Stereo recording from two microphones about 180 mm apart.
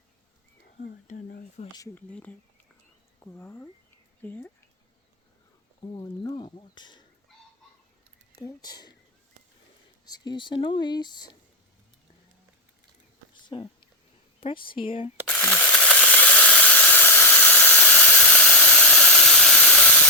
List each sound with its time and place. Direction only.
1.0 s speech: 45° left (ahead or behind)
1.7 s speech: 20° left (ahead or behind)
2.0 s speech: 10° left (ahead or behind)
5.8 s speech: 25° left (ahead or behind)
8.4 s speech: 20° left (ahead or behind)
10.1 s speech: 25° left (ahead or behind)
13.5 s speech: 30° left (ahead or behind)
15.4 s a sound: 10° left (ahead or behind)